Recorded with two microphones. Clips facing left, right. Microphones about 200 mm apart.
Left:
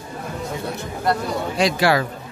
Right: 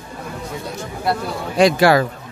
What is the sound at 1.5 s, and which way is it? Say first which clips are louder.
Speech: right 6 dB; 50° right (ahead or behind).